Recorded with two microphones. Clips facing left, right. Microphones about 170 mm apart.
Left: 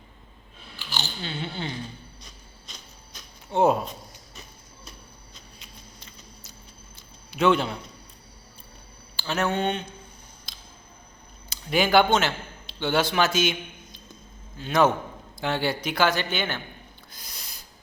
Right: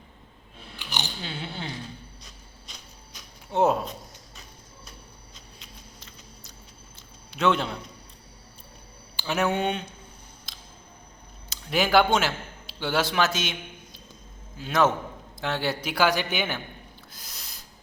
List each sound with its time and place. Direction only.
0.8 s scissors: 15° right (ahead or behind)
1.2 s a man's voice: 5° right (ahead or behind)
3.5 s a man's voice: centre (ahead or behind)
5.5 s a sound: centre (ahead or behind)
7.3 s a man's voice: centre (ahead or behind)
9.1 s speech: 15° right (ahead or behind)
10.5 s a sound: centre (ahead or behind)
11.4 s a man's voice: centre (ahead or behind)
17.1 s owl: centre (ahead or behind)